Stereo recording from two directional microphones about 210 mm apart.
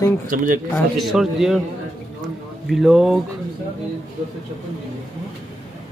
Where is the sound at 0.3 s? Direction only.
40° right (ahead or behind).